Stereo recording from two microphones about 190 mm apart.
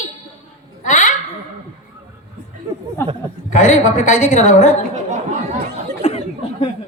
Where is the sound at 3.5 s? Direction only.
40° left (ahead or behind).